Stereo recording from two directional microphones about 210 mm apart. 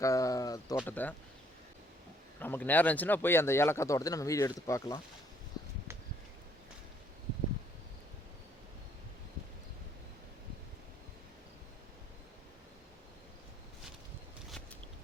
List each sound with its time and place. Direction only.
0.0 s speech: 15° left (ahead or behind)
2.4 s speech: 10° left (ahead or behind)